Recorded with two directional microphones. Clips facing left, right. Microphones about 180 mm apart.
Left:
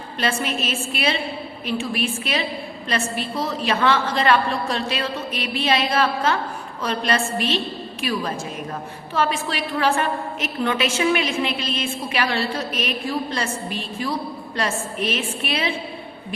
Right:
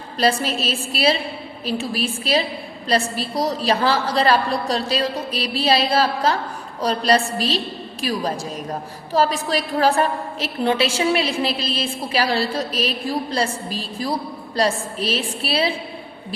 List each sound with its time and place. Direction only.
0.2 s a woman's voice: 35° right (ahead or behind)